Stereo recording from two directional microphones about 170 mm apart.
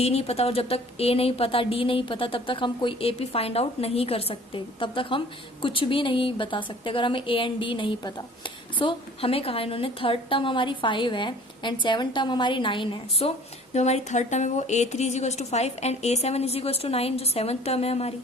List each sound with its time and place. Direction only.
0.0 s a woman's voice: 35° left (ahead or behind)